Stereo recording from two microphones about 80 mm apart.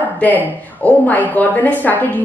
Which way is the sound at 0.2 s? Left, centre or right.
Centre.